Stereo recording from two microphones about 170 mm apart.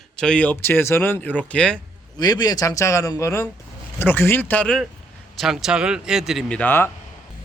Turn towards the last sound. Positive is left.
turn(degrees=10)  # may be behind; listen again after turning